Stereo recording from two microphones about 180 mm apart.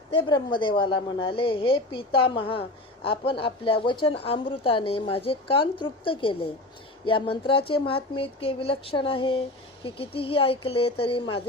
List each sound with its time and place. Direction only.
0.1 s a woman's voice: 25° left (ahead or behind)